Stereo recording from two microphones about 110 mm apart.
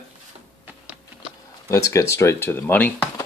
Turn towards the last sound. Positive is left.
turn(degrees=20)  # may be behind; listen again after turning